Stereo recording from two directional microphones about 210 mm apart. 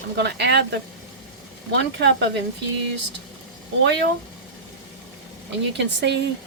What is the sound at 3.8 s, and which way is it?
Speech, 55° right (ahead or behind).